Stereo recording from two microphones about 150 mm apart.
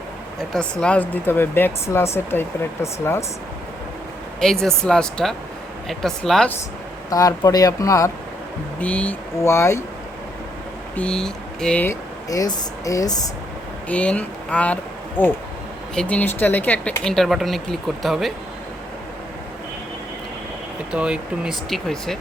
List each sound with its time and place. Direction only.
0.3 s speech: 5° left (ahead or behind)
4.6 s speech: 5° left (ahead or behind)
7.1 s speech: 25° left (ahead or behind)
8.8 s speech: 10° left (ahead or behind)
10.9 s speech: 5° left (ahead or behind)
12.3 s speech: 25° left (ahead or behind)
13.8 s speech: 10° left (ahead or behind)
20.9 s speech: 5° right (ahead or behind)